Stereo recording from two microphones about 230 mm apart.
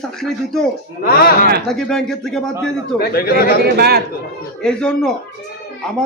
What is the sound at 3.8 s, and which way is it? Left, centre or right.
Speech, right.